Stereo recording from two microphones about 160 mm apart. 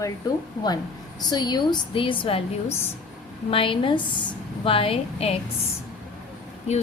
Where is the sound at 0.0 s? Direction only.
25° left (ahead or behind).